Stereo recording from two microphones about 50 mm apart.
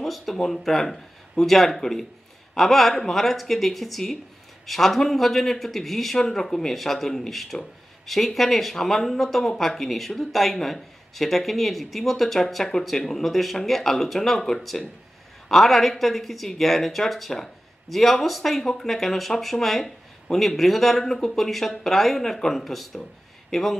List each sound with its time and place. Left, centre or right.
0.0 s speech: centre